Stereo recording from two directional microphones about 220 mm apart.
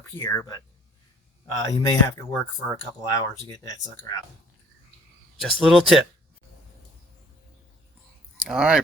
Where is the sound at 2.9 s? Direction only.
15° left (ahead or behind).